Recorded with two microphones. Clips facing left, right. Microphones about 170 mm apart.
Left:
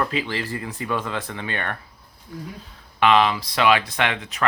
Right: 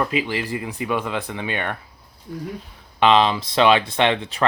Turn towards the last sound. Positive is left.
turn(degrees=-30)  # may be behind; listen again after turning